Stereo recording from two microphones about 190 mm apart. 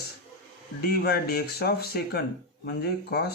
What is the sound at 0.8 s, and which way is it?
Speech, 55° left (ahead or behind).